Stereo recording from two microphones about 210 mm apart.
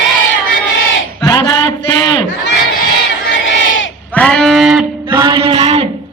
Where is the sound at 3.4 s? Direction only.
65° left (ahead or behind).